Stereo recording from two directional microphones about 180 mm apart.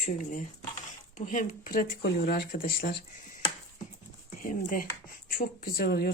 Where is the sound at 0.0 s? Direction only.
45° left (ahead or behind).